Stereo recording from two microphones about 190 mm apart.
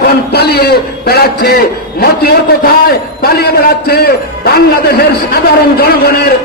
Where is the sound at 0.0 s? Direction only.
55° left (ahead or behind).